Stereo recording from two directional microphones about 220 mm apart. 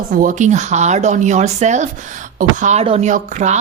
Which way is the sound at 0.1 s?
40° right (ahead or behind).